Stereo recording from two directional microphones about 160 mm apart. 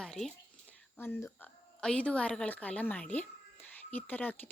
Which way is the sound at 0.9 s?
15° left (ahead or behind).